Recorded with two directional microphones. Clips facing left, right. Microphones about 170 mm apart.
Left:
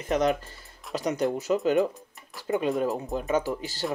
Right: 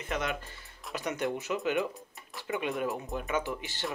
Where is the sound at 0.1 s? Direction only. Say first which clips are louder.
Left 10 dB; 35° left (ahead or behind).